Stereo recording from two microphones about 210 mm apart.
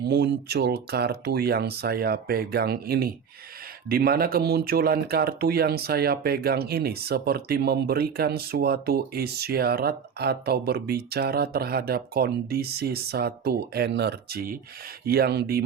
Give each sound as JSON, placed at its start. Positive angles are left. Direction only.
{"t": 0.0, "sound": "speech", "side_deg": -55}